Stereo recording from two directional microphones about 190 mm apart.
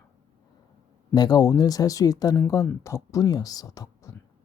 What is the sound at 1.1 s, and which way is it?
Speech, 20° left (ahead or behind).